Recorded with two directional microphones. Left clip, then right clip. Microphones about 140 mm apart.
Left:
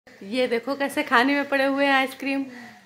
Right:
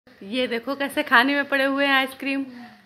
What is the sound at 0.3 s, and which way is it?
Speech, 5° left (ahead or behind).